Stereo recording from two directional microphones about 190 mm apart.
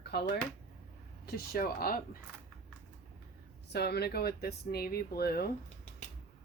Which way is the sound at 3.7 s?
60° left (ahead or behind).